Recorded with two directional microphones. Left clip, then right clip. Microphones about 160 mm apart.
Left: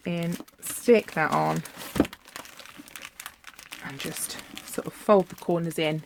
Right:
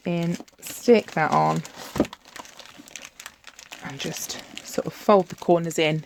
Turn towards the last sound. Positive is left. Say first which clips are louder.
# right 6 dB
turn(degrees=-50)  # may be behind; listen again after turning